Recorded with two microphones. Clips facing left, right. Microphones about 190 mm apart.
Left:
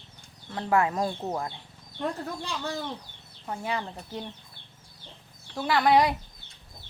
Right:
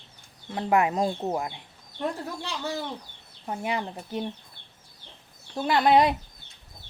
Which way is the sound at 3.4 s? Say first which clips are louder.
Right 2 dB; 20° right (ahead or behind).